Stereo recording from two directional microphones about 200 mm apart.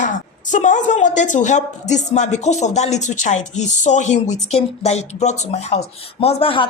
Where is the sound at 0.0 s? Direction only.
40° left (ahead or behind).